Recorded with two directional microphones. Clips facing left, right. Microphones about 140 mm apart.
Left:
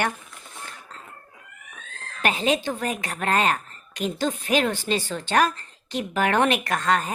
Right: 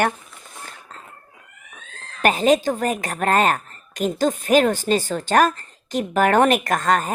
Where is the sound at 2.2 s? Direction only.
45° right (ahead or behind).